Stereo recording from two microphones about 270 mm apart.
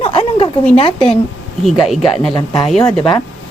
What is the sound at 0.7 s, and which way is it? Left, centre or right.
Speech, left.